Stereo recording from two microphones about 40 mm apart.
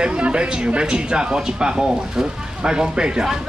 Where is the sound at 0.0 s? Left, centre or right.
Right.